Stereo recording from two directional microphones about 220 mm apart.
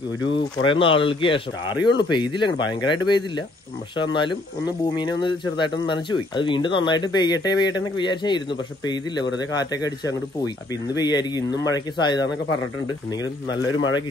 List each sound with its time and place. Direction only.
0.3 s speech: 25° left (ahead or behind)
13.7 s speech: 60° left (ahead or behind)